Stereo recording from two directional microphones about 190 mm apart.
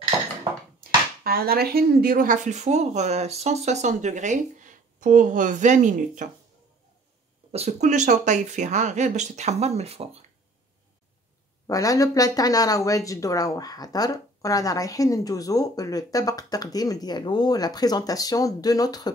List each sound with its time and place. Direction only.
0.7 s speech: 55° right (ahead or behind)
7.5 s speech: 35° right (ahead or behind)
11.6 s speech: 15° left (ahead or behind)